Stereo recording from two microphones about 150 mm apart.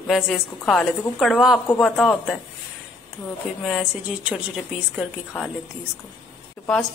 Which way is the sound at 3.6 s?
5° right (ahead or behind).